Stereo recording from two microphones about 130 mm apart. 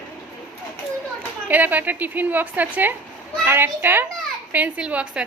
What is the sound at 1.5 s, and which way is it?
A woman's voice, 15° right (ahead or behind).